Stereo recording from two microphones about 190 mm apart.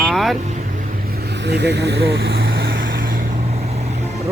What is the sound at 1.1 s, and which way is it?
Vehicle, 60° right (ahead or behind).